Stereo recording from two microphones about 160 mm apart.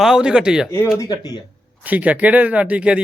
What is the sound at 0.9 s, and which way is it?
Speech, 25° left (ahead or behind).